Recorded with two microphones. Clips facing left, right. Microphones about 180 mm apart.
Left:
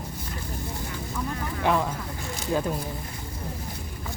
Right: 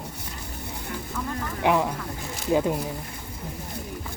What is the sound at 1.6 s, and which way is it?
Speech, 15° right (ahead or behind).